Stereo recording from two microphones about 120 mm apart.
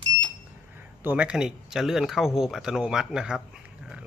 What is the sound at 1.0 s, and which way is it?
Speech, 10° right (ahead or behind).